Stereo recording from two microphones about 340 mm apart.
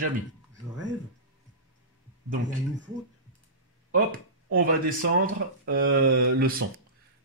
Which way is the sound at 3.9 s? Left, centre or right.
Right.